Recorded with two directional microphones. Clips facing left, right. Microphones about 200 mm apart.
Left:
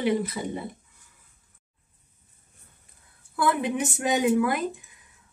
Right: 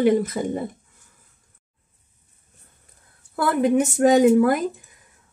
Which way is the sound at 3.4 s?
45° right (ahead or behind).